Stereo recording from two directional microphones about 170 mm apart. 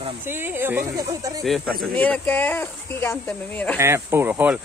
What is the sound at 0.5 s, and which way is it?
Speech, 15° right (ahead or behind).